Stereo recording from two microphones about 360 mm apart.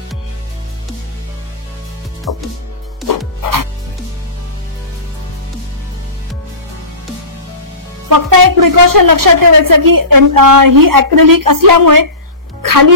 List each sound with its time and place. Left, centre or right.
2.3 s a woman's voice: right
3.4 s music: right
8.1 s a woman's voice: right
12.6 s music: right